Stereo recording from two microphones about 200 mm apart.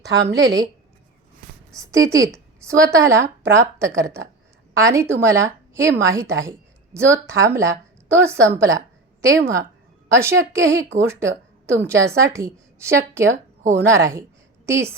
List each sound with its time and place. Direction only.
0.3 s a woman's voice: 15° right (ahead or behind)
1.7 s a woman's voice: 15° right (ahead or behind)